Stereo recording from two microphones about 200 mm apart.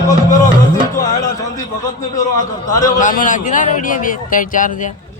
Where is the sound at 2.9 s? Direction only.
40° left (ahead or behind).